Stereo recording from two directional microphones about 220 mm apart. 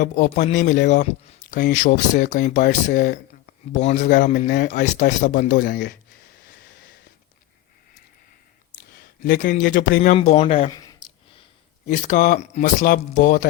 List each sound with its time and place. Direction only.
0.0 s speech: 35° left (ahead or behind)
0.5 s speech: 50° left (ahead or behind)
1.7 s speech: 35° left (ahead or behind)
9.2 s speech: 45° left (ahead or behind)
10.2 s speech: 25° left (ahead or behind)
11.9 s speech: 35° left (ahead or behind)